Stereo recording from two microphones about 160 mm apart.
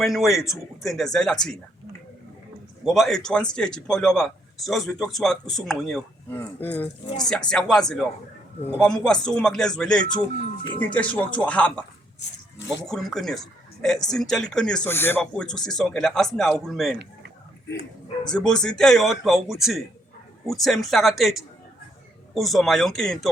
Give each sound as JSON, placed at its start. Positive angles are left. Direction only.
{"t": 0.0, "sound": "a man's voice", "side_deg": 0}
{"t": 2.8, "sound": "a man's voice", "side_deg": 0}
{"t": 6.3, "sound": "a man's voice", "side_deg": 10}
{"t": 12.9, "sound": "a man's voice", "side_deg": 0}
{"t": 18.3, "sound": "a man's voice", "side_deg": 5}